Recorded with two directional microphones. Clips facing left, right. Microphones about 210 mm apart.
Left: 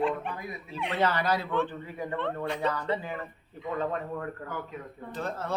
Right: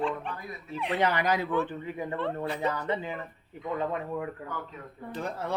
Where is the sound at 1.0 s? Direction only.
15° right (ahead or behind).